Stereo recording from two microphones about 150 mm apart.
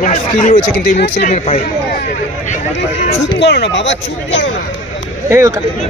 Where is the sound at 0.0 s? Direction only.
55° left (ahead or behind); by 1.2 s 80° left.